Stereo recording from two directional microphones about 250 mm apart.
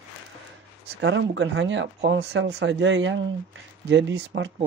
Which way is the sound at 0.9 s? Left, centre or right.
Right.